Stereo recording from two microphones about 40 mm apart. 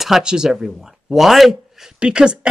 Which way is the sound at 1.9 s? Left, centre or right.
Right.